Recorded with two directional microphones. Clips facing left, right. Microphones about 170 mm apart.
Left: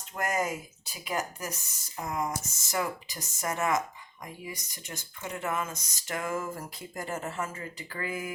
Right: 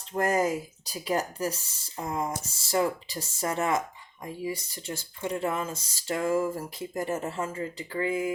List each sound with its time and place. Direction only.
0.1 s speech: 30° right (ahead or behind)